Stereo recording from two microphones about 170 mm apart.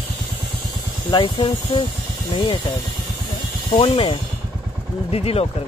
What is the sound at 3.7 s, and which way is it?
Speech, 30° left (ahead or behind).